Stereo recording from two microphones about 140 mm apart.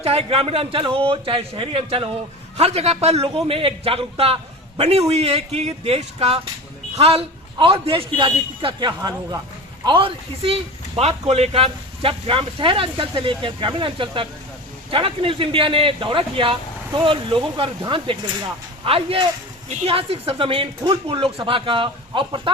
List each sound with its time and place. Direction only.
0.0 s a man's voice: 45° right (ahead or behind)